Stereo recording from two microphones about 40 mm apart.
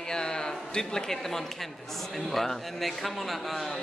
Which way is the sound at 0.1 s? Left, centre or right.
Centre.